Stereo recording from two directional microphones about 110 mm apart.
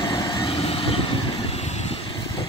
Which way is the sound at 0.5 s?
60° left (ahead or behind).